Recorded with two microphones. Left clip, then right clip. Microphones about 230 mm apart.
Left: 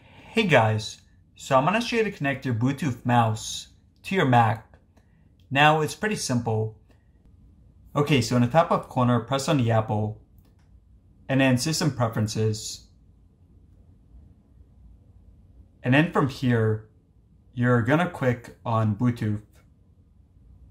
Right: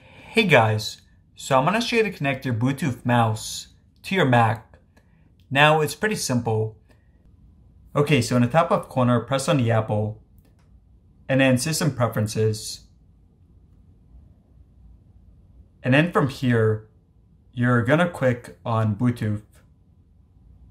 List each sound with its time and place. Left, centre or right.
0.0 s speech: centre
7.9 s speech: centre
11.2 s speech: centre
15.8 s speech: centre